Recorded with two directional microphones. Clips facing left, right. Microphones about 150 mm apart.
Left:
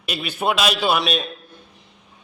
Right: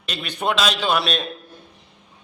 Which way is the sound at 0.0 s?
10° left (ahead or behind).